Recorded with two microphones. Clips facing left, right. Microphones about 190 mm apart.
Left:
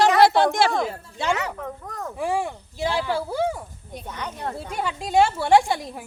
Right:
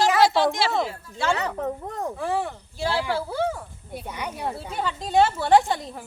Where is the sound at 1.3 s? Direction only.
35° right (ahead or behind).